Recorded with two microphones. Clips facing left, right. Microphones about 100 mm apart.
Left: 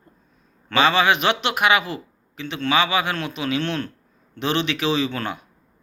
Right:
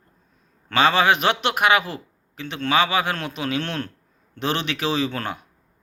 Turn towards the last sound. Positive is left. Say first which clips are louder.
# left 1 dB
turn(degrees=-45)  # may be behind; listen again after turning